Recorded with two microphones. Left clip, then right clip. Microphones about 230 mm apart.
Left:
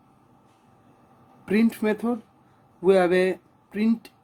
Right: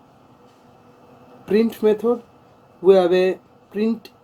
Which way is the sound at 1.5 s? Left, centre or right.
Left.